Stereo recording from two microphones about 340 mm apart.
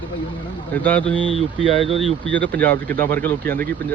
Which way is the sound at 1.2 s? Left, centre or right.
Centre.